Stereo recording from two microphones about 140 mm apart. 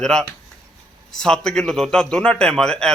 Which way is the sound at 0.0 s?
5° left (ahead or behind).